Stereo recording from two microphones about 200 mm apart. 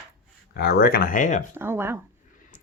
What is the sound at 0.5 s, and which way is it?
Speech, 50° left (ahead or behind).